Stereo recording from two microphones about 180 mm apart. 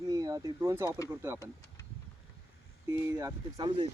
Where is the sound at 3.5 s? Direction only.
30° right (ahead or behind).